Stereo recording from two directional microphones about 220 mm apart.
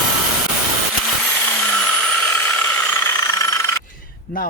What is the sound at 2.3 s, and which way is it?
Vehicle, 5° left (ahead or behind).